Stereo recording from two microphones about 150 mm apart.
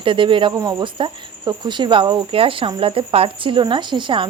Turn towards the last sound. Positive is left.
turn(degrees=-35)  # may be behind; listen again after turning